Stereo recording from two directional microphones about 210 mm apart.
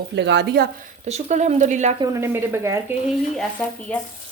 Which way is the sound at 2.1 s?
10° right (ahead or behind).